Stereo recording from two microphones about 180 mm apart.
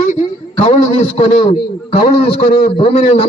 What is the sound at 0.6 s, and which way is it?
A man's voice, 35° left (ahead or behind).